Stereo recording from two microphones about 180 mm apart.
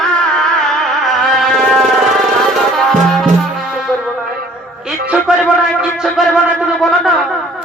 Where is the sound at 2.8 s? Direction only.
Centre (ahead or behind).